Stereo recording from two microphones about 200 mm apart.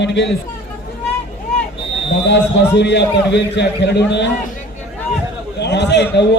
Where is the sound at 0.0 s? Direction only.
60° left (ahead or behind).